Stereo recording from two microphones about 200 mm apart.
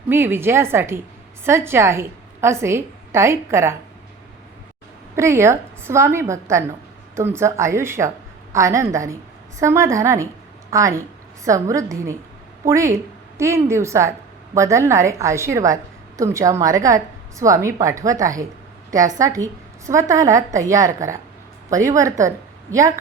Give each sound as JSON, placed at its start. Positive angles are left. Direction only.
{"t": 0.1, "sound": "a woman's voice", "side_deg": -10}
{"t": 5.1, "sound": "a woman's voice", "side_deg": -15}